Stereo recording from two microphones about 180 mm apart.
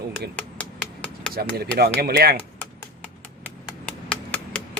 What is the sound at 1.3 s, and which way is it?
Speech, 60° right (ahead or behind).